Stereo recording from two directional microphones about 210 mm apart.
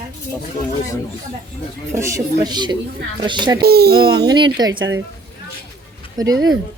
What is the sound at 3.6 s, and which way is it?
Speech, 50° right (ahead or behind).